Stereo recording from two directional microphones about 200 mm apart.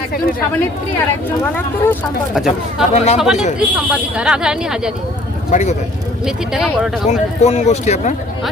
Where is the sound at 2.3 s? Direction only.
Centre (ahead or behind).